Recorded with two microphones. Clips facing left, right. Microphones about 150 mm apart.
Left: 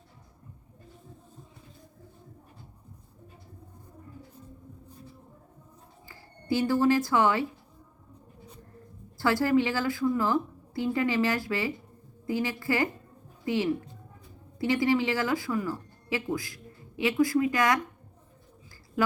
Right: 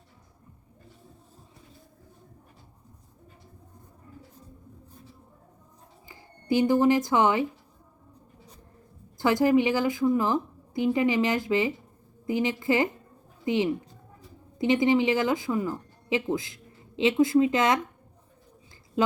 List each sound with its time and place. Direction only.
6.1 s speech: 20° right (ahead or behind)
9.1 s a woman's voice: 20° right (ahead or behind)
19.0 s speech: 20° right (ahead or behind)